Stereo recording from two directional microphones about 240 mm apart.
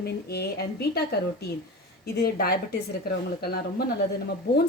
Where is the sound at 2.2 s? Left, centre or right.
Left.